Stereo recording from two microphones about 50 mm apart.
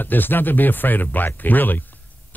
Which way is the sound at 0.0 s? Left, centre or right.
Left.